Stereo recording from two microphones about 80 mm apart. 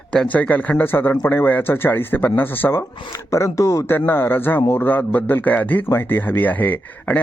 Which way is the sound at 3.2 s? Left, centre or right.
Left.